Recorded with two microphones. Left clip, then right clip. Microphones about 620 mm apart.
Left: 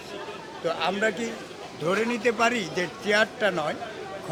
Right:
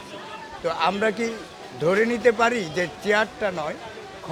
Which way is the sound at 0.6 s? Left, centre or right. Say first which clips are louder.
Right 3 dB; right.